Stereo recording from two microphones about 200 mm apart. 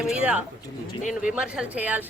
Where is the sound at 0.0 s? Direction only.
5° right (ahead or behind).